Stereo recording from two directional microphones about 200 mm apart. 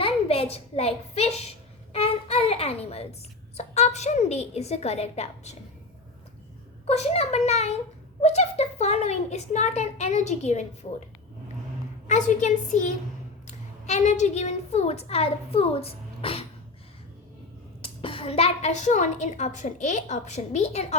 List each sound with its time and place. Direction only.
0.0 s a sound: 30° left (ahead or behind)
3.6 s a woman's voice: 35° left (ahead or behind)
6.8 s a woman's voice: 30° left (ahead or behind)
12.0 s a woman's voice: 35° left (ahead or behind)
17.8 s a woman's voice: 25° left (ahead or behind)